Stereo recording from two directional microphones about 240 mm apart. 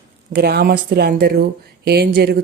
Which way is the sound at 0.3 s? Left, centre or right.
Right.